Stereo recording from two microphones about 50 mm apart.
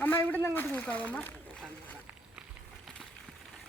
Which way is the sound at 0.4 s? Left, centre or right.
Left.